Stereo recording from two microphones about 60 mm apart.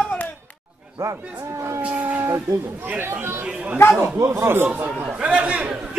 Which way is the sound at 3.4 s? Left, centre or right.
Centre.